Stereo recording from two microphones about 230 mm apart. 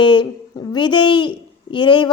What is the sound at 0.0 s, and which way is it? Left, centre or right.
Speech, left.